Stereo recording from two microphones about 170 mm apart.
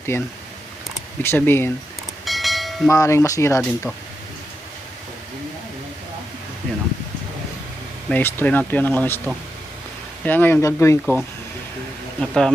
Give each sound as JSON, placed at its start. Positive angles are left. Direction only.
{"t": 0.1, "sound": "speech", "side_deg": 15}
{"t": 2.2, "sound": "train", "side_deg": 0}
{"t": 2.9, "sound": "wind chime", "side_deg": 20}
{"t": 8.1, "sound": "speech", "side_deg": 10}
{"t": 10.2, "sound": "speech", "side_deg": 10}
{"t": 11.0, "sound": "speech", "side_deg": 0}